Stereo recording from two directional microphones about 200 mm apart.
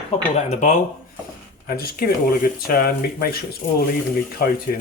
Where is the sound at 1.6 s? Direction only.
50° left (ahead or behind).